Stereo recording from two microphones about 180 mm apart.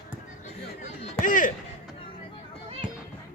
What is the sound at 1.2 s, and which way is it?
Speech, 45° left (ahead or behind).